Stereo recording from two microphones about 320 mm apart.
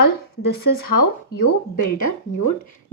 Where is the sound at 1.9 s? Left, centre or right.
Left.